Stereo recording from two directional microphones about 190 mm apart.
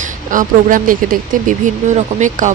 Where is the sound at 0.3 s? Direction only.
45° right (ahead or behind).